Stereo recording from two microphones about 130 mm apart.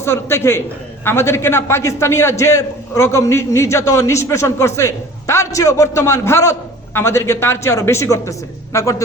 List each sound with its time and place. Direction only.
0.0 s a man's voice: 20° left (ahead or behind)